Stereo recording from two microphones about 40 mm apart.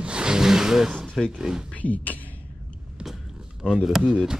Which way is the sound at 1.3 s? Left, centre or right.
Centre.